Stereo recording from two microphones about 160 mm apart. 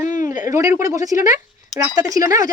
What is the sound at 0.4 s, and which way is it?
A child's voice, 20° right (ahead or behind).